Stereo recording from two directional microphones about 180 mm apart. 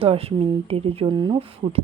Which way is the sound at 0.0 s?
35° right (ahead or behind).